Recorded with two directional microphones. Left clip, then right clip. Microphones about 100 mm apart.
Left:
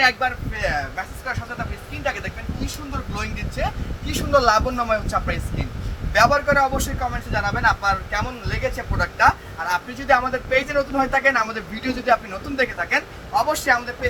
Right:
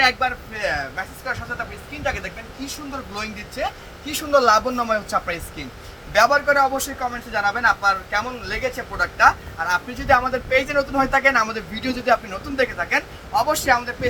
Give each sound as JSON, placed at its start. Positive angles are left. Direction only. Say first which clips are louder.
{"t": 0.0, "sound": "a man's voice", "louder": "even", "side_deg": -5}